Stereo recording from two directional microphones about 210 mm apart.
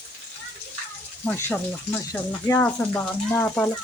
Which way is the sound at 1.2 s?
5° left (ahead or behind).